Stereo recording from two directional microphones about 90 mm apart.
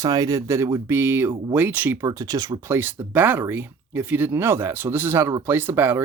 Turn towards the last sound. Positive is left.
turn(degrees=-25)  # may be behind; listen again after turning